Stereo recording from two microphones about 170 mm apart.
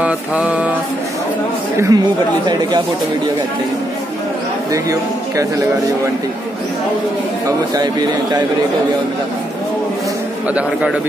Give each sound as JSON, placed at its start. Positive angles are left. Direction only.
{"t": 0.0, "sound": "mantra", "side_deg": -10}
{"t": 1.8, "sound": "speech", "side_deg": -20}
{"t": 7.4, "sound": "speech", "side_deg": -25}